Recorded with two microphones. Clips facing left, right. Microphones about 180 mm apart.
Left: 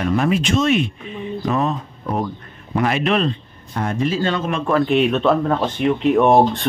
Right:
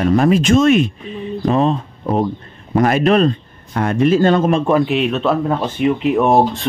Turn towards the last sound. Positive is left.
turn(degrees=0)  # may be behind; listen again after turning